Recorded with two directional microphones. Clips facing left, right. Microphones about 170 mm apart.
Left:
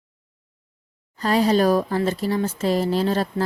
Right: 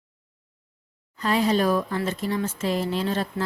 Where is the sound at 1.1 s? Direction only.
35° left (ahead or behind).